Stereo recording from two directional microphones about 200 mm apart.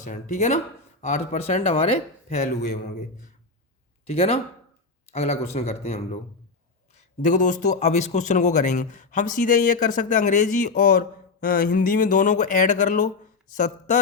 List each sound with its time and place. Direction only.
0.0 s speech: 40° left (ahead or behind)
4.0 s speech: 30° left (ahead or behind)